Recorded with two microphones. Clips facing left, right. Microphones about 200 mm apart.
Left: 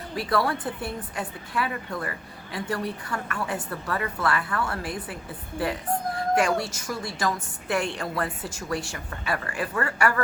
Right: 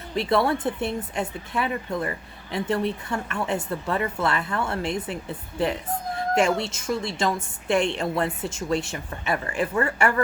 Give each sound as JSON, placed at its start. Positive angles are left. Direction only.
{"t": 0.2, "sound": "speech", "side_deg": -25}
{"t": 6.1, "sound": "speech", "side_deg": -25}